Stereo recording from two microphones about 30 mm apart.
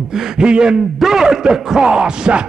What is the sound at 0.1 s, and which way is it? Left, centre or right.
Speech, right.